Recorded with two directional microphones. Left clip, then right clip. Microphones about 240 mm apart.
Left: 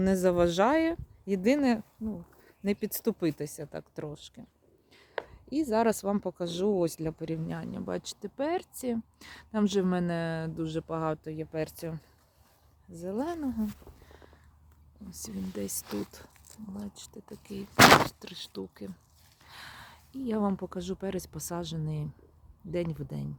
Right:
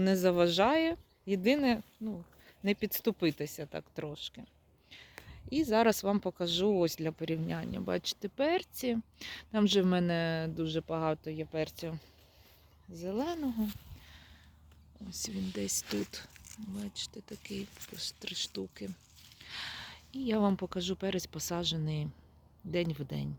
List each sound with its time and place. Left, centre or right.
0.0 s speech: centre
5.5 s speech: centre
15.1 s speech: centre